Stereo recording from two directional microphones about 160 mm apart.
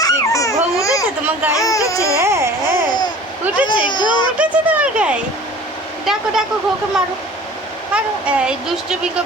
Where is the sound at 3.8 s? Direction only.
30° left (ahead or behind).